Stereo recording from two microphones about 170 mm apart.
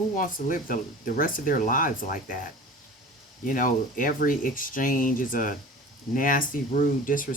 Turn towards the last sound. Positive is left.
turn(degrees=55)  # may be behind; listen again after turning